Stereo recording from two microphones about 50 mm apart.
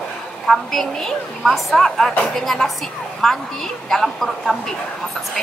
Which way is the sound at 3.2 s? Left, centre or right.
Centre.